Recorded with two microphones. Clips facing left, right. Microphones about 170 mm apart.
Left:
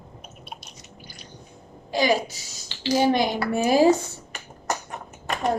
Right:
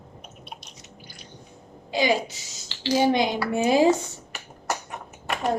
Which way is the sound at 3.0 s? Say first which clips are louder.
Even; 20° right (ahead or behind).